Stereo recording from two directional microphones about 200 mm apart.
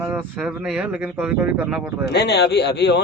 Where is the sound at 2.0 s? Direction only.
55° left (ahead or behind).